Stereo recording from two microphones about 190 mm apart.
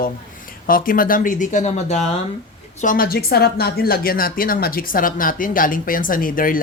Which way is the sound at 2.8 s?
50° left (ahead or behind).